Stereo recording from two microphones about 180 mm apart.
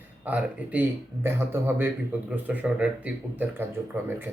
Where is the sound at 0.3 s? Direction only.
10° right (ahead or behind).